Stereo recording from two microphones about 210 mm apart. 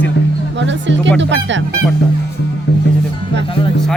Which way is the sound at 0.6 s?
60° right (ahead or behind).